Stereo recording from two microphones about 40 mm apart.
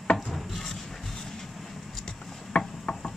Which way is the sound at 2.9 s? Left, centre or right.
Centre.